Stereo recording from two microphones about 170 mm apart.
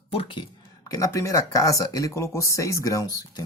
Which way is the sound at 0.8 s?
20° left (ahead or behind).